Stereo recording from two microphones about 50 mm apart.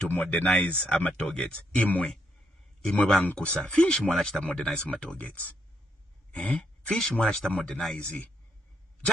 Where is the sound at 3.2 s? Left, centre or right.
Left.